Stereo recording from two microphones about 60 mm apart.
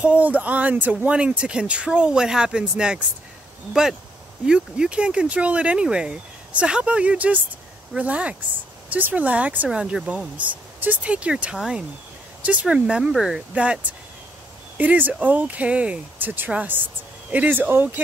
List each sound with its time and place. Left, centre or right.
0.0 s speech: right
1.1 s speech: centre
4.5 s speech: centre
9.7 s speech: centre
10.0 s speech: right
13.1 s speech: centre
14.8 s speech: right